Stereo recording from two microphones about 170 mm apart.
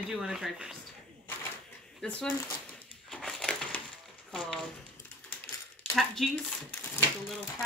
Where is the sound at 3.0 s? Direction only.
Centre (ahead or behind).